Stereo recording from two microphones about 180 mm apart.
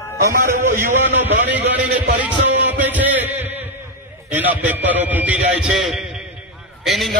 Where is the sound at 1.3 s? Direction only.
80° right.